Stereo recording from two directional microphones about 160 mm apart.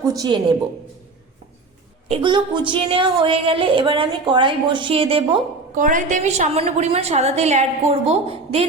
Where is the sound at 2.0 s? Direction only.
30° right (ahead or behind).